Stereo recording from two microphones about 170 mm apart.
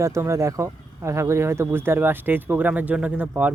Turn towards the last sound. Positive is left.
turn(degrees=-10)  # may be behind; listen again after turning